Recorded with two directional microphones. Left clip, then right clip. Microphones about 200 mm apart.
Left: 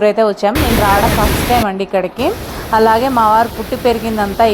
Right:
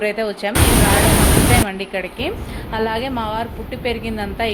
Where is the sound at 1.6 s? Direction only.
25° left (ahead or behind).